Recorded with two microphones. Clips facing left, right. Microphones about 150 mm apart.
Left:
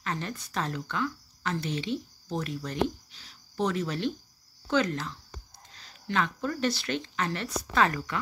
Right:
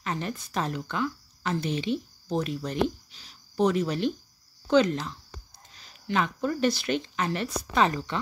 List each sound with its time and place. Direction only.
0.0 s speech: 15° right (ahead or behind)